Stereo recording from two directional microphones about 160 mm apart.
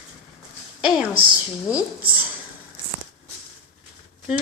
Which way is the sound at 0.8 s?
5° right (ahead or behind).